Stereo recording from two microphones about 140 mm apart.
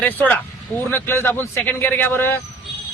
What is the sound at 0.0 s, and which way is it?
Speech, 10° left (ahead or behind).